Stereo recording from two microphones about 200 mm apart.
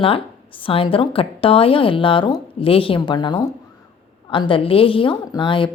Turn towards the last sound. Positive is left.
turn(degrees=25)  # may be behind; listen again after turning